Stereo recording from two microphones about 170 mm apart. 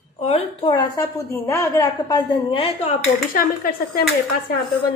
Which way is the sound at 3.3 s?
60° left (ahead or behind).